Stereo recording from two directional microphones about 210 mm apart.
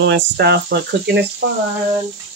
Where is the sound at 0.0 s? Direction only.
55° right (ahead or behind).